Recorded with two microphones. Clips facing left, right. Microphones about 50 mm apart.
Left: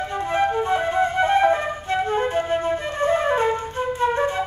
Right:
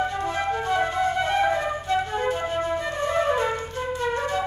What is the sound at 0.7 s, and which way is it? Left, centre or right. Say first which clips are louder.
Flute: left 2 dB; left.